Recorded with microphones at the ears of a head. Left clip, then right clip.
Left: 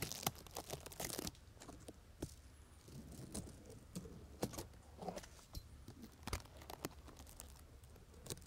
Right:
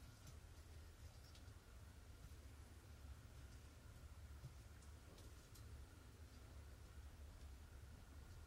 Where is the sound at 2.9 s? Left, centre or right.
Left.